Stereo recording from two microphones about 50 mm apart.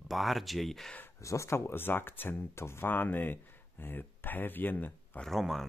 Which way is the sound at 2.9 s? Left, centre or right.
Left.